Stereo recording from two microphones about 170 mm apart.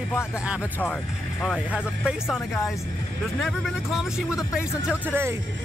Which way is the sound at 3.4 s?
Centre (ahead or behind).